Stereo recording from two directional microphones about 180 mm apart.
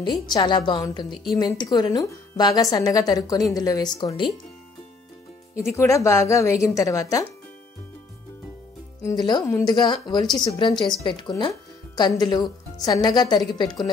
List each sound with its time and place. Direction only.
0.0 s a woman's voice: 25° left (ahead or behind)
5.5 s a woman's voice: 15° left (ahead or behind)
9.0 s a woman's voice: 20° left (ahead or behind)